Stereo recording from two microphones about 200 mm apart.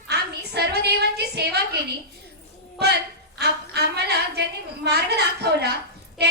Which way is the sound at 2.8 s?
55° right (ahead or behind).